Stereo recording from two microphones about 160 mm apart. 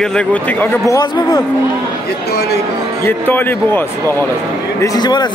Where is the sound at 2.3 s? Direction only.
85° left.